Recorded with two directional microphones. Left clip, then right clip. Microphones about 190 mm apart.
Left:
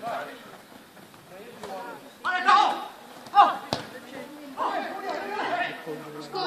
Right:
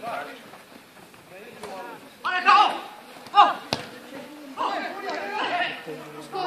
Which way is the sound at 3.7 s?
10° left (ahead or behind).